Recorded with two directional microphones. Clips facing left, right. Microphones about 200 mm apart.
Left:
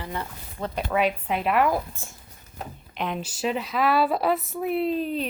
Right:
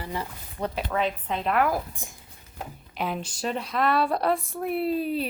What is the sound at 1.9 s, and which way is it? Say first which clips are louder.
Speech: even; 15° right (ahead or behind).